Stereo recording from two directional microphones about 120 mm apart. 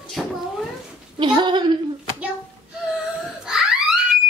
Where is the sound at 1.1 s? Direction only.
40° right (ahead or behind).